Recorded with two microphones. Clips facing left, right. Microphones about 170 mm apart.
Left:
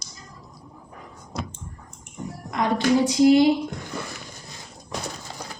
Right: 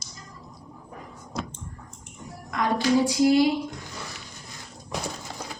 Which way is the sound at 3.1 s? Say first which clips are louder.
Left 6 dB; 20° left (ahead or behind).